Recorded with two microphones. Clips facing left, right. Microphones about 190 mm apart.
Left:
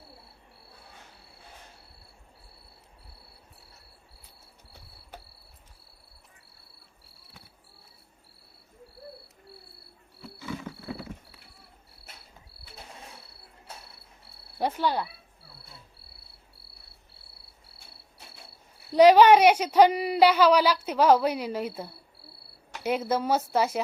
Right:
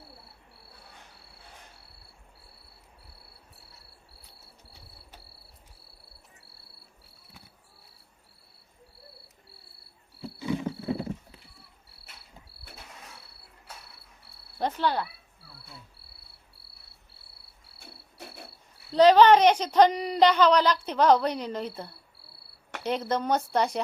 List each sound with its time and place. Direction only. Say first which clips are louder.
10.4 s wild animals: right 7 dB; 20° right (ahead or behind)
14.6 s a woman's voice: even; 10° left (ahead or behind)
17.7 s cricket: right 9 dB; 60° right (ahead or behind)
18.9 s a woman's voice: left 1 dB; 10° left (ahead or behind)
22.8 s speech: left 2 dB; 10° left (ahead or behind)